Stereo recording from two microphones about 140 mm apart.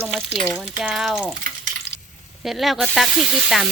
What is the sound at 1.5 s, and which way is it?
Frying, 75° right (ahead or behind).